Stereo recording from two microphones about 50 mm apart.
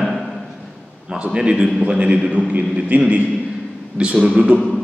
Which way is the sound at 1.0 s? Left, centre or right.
Centre.